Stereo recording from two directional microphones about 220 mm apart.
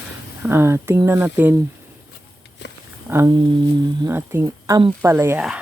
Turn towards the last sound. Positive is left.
turn(degrees=-5)  # may be behind; listen again after turning